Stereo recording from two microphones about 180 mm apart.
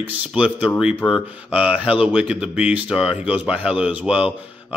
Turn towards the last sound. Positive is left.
turn(degrees=-5)  # may be behind; listen again after turning